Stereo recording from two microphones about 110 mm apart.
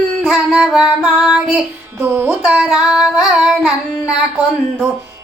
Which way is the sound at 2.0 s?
20° right (ahead or behind).